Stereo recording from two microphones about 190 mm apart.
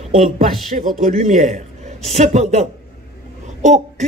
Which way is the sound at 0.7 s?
40° right (ahead or behind).